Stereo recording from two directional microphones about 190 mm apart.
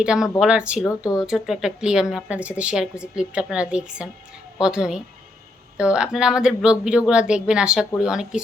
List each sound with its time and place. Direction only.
0.0 s a woman's voice: 5° right (ahead or behind)
0.9 s speech: 20° left (ahead or behind)
1.2 s a woman's voice: 5° right (ahead or behind)